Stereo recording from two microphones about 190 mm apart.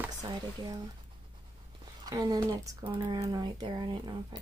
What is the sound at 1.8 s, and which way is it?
Speech, 20° right (ahead or behind).